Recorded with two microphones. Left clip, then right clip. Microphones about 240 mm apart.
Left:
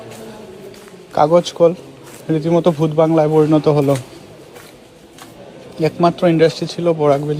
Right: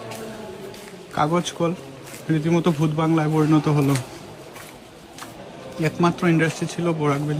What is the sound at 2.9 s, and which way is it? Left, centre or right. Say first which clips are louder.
Speech: left 11 dB; left.